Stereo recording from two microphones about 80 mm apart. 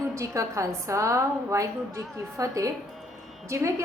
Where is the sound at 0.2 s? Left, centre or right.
Right.